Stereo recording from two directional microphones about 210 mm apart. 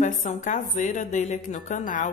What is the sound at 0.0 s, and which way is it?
A woman's voice, 35° left (ahead or behind).